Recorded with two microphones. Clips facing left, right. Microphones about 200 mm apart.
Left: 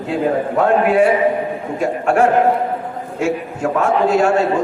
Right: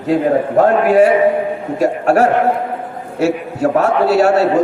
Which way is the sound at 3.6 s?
40° right (ahead or behind).